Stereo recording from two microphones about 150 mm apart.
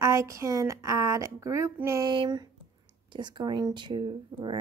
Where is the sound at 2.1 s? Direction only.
30° right (ahead or behind).